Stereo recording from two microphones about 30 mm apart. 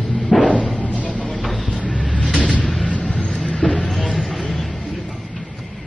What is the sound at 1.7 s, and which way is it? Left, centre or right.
Vehicle, left.